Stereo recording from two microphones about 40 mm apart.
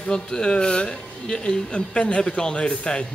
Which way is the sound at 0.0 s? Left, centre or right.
Centre.